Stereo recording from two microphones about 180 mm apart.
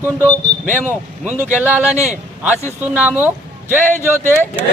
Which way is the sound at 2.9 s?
10° right (ahead or behind).